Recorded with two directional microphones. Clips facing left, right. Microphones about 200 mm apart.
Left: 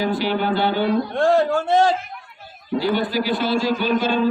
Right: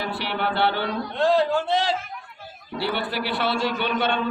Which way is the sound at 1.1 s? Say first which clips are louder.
Even; 50° left (ahead or behind).